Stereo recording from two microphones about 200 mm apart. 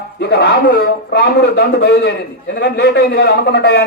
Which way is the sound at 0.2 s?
55° left (ahead or behind).